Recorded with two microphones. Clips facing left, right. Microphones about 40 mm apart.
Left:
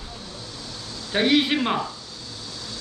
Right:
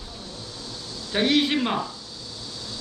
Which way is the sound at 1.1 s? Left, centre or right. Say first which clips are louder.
Left 1 dB; centre.